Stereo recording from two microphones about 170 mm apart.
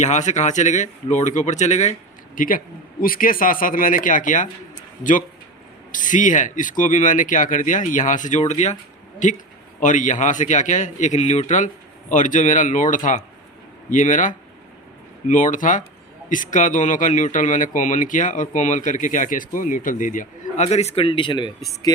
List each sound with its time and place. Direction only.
0.0 s speech: 45° left (ahead or behind)
5.9 s speech: 50° left (ahead or behind); by 22.0 s 25° left (ahead or behind)